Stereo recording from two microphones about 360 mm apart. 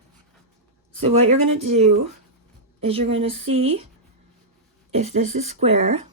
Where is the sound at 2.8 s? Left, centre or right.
Centre.